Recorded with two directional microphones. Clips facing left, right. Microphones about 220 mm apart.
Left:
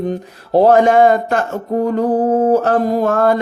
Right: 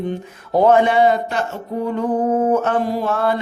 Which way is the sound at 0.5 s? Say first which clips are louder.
Left 4 dB; 35° left (ahead or behind).